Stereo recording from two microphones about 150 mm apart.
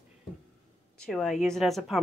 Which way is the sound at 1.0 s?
Centre (ahead or behind).